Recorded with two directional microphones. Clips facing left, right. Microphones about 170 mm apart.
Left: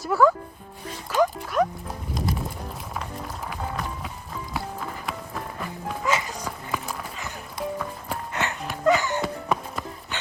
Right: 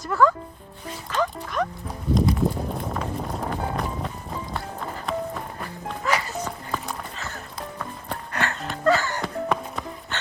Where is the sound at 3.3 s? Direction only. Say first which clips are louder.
Right 6 dB; 35° right (ahead or behind).